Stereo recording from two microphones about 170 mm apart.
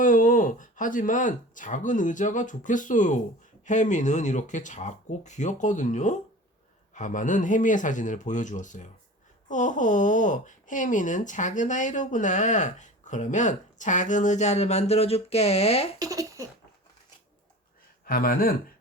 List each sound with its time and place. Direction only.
0.0 s speech: 50° left (ahead or behind)
16.0 s baby laughter: 20° right (ahead or behind)
18.0 s speech: 60° left (ahead or behind)